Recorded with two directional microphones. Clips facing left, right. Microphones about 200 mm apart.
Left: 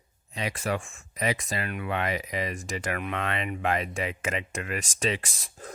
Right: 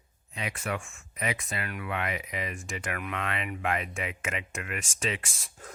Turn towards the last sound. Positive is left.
turn(degrees=35)  # may be behind; listen again after turning